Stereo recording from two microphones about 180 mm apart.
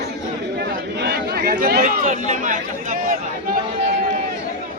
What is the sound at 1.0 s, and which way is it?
Chatter, 60° right (ahead or behind).